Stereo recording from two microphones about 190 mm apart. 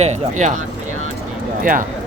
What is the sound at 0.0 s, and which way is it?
Speech, 40° right (ahead or behind).